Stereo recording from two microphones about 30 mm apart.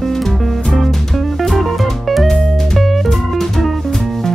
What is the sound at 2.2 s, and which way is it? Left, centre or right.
Music, centre.